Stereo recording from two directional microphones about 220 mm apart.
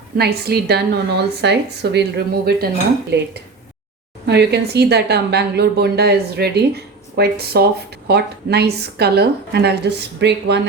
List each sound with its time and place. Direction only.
0.2 s a woman's voice: 45° right (ahead or behind)
4.3 s a woman's voice: 50° right (ahead or behind)